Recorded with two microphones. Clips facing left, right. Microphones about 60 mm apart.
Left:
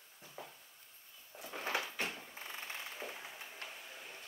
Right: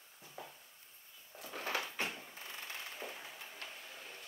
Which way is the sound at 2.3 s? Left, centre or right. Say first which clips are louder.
Left 1 dB; centre.